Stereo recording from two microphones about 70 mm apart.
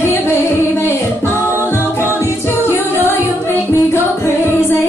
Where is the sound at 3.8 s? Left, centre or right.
Left.